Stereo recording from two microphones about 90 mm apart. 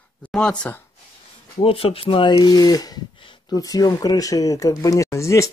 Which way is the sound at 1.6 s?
85° left.